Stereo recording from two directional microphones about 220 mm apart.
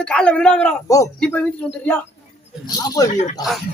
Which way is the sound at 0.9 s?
15° left (ahead or behind).